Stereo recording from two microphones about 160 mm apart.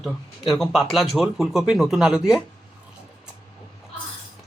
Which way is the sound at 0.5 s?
Centre (ahead or behind).